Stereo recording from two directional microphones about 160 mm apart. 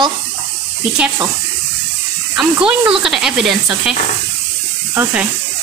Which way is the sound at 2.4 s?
5° right (ahead or behind).